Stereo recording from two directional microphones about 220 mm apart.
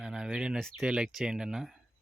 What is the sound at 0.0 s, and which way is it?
Speech, 5° right (ahead or behind).